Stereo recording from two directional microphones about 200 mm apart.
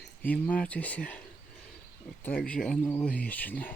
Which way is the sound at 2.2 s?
5° left (ahead or behind).